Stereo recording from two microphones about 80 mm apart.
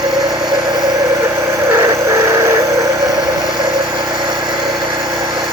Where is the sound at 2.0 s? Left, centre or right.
Right.